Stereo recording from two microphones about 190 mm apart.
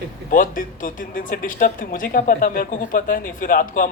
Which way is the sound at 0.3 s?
45° left (ahead or behind).